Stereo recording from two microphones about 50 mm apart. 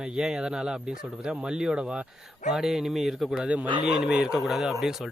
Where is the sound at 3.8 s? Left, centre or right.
Centre.